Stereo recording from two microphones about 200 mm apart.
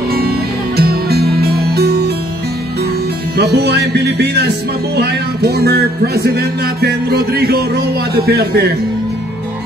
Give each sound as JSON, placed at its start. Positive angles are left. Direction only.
{"t": 0.7, "sound": "music", "side_deg": -50}
{"t": 3.3, "sound": "music", "side_deg": -55}